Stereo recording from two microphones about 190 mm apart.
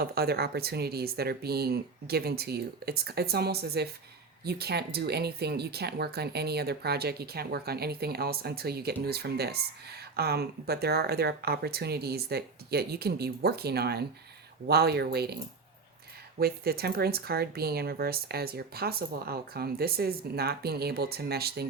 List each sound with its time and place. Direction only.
0.0 s speech: 55° right (ahead or behind)
16.4 s speech: 55° right (ahead or behind)